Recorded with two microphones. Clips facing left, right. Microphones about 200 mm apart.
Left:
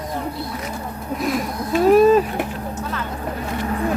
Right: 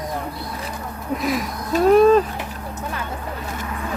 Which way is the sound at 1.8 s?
5° left (ahead or behind).